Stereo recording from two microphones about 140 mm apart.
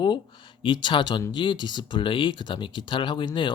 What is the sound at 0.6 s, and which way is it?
Speech, 35° left (ahead or behind).